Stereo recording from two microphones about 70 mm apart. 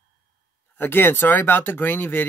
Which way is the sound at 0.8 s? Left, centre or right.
Left.